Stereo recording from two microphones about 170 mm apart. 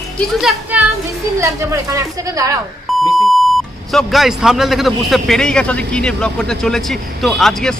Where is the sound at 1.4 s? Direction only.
20° right (ahead or behind).